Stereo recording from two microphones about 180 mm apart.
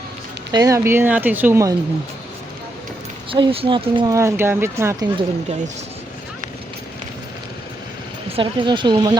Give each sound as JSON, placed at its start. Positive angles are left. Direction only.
{"t": 0.5, "sound": "speech", "side_deg": -20}
{"t": 3.3, "sound": "speech", "side_deg": -30}
{"t": 5.1, "sound": "speech", "side_deg": -35}
{"t": 8.4, "sound": "speech", "side_deg": -25}